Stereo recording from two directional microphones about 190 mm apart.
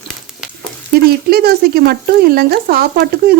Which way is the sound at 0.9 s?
55° right (ahead or behind).